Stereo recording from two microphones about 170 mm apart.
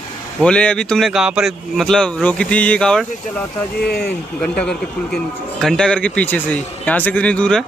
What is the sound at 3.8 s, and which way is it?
Speech, 70° left (ahead or behind).